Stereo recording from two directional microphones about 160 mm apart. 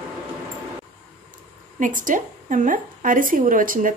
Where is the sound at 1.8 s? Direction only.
55° right (ahead or behind).